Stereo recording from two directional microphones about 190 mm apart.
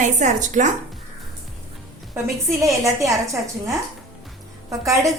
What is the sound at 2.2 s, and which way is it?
Speech, 15° right (ahead or behind).